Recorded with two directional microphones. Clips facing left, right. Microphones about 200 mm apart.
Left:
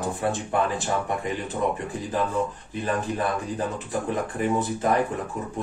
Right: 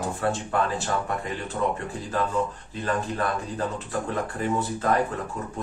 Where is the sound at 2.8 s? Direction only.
20° left (ahead or behind).